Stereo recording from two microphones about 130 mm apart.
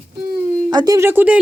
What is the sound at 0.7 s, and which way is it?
Speech, 30° right (ahead or behind).